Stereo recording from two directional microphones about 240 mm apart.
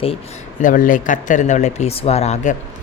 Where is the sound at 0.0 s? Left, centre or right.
Left.